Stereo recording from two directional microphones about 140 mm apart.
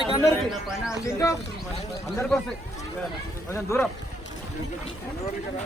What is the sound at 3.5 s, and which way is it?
Speech, 20° left (ahead or behind).